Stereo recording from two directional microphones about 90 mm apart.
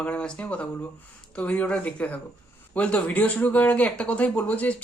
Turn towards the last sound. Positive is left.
turn(degrees=15)  # may be behind; listen again after turning